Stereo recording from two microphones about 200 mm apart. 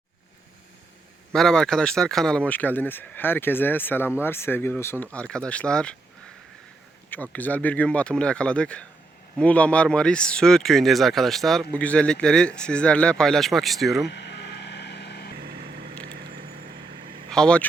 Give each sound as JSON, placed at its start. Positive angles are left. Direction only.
{"t": 1.3, "sound": "speech", "side_deg": 5}
{"t": 7.1, "sound": "speech", "side_deg": 10}
{"t": 14.1, "sound": "vehicle", "side_deg": 55}
{"t": 15.4, "sound": "vehicle", "side_deg": -50}
{"t": 17.2, "sound": "speech", "side_deg": 5}